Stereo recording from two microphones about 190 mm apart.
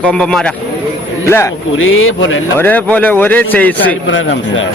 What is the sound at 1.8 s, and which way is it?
Speech, 90° left.